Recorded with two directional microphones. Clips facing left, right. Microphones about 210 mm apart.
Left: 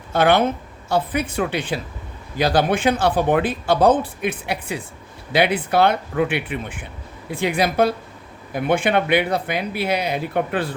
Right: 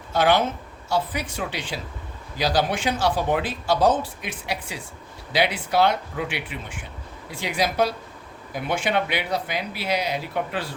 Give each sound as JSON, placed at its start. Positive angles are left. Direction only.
{"t": 0.1, "sound": "speech", "side_deg": 55}